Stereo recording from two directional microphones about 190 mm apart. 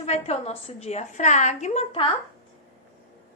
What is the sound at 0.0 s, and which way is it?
A woman's voice, 35° left (ahead or behind).